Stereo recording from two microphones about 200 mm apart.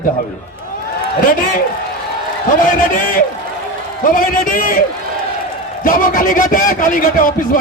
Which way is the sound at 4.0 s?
40° left (ahead or behind).